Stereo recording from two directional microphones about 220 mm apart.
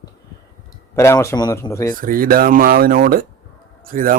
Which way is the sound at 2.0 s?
40° right (ahead or behind).